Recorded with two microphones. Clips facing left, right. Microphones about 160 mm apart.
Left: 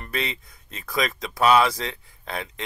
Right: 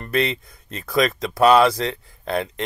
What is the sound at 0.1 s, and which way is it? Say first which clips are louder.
Speech: right 8 dB; 65° right (ahead or behind).